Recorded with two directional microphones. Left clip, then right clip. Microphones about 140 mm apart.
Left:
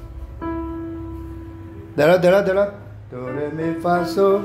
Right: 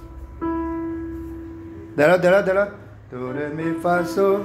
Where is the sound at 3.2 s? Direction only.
5° right (ahead or behind).